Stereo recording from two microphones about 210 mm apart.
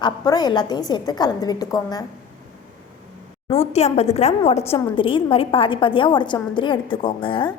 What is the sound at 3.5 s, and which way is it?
A woman's voice, 30° left (ahead or behind).